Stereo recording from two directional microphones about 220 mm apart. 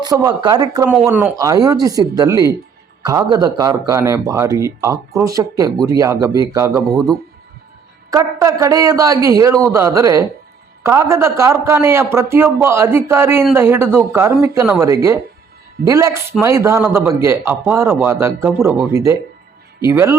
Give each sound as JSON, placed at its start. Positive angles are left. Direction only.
{"t": 0.0, "sound": "speech", "side_deg": -15}
{"t": 8.1, "sound": "speech", "side_deg": -15}